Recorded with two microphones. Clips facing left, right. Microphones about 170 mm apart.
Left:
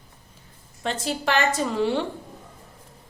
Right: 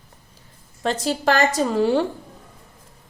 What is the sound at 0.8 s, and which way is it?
A woman's voice, 40° right (ahead or behind).